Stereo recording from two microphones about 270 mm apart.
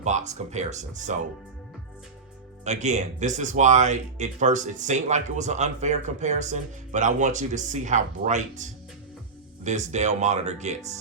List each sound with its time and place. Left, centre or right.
0.0 s speech: right
2.6 s speech: right